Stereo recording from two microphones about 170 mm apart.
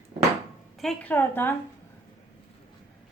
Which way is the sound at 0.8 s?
5° left (ahead or behind).